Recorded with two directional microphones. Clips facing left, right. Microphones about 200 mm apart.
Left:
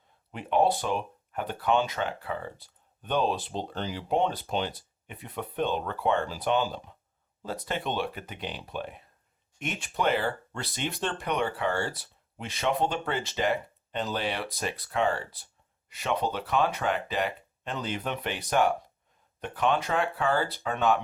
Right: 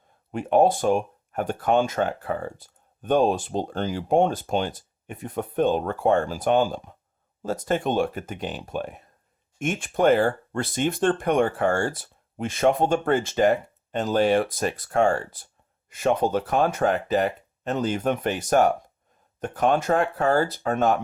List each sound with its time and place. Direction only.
0.3 s speech: 45° right (ahead or behind)